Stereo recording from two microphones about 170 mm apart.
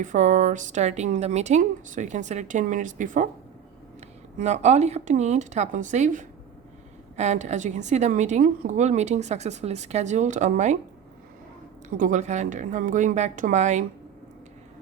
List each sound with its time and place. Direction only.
0.0 s a woman's voice: 45° right (ahead or behind)
4.4 s a woman's voice: 40° right (ahead or behind)
11.9 s a woman's voice: 50° right (ahead or behind)